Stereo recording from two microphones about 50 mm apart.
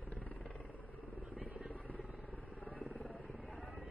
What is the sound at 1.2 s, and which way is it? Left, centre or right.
Vehicle, right.